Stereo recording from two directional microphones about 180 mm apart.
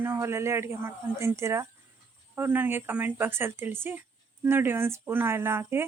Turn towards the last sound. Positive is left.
turn(degrees=-15)  # may be behind; listen again after turning